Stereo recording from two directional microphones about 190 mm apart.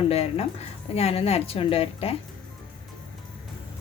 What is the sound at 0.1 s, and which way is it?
A woman's voice, 35° left (ahead or behind).